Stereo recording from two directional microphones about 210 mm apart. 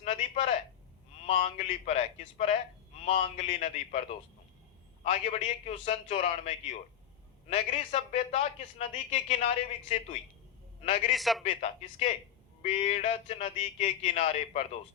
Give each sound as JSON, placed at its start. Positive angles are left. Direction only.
{"t": 0.0, "sound": "a sound", "side_deg": 30}
{"t": 1.3, "sound": "a man's voice", "side_deg": 35}
{"t": 5.0, "sound": "a man's voice", "side_deg": 30}
{"t": 11.1, "sound": "a man's voice", "side_deg": 0}
{"t": 11.4, "sound": "a man's voice", "side_deg": 30}